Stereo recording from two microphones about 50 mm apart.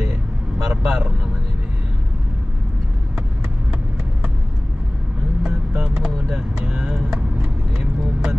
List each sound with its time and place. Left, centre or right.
0.7 s vehicle: centre
5.4 s vehicle: centre